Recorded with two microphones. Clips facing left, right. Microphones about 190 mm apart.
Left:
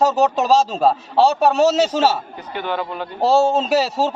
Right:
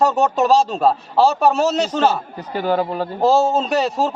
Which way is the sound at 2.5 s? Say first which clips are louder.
Right 5 dB; 40° right (ahead or behind).